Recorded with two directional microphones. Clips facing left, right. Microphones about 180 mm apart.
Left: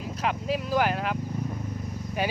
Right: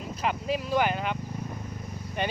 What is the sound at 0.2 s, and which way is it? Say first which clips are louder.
Speech: left 1 dB; centre (ahead or behind).